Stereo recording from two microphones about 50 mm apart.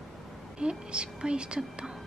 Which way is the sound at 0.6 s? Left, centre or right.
Centre.